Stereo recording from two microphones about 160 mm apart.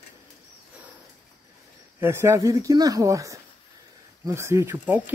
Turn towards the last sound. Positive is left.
turn(degrees=-10)  # may be behind; listen again after turning